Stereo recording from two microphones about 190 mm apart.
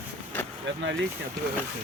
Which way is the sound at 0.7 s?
75° right (ahead or behind).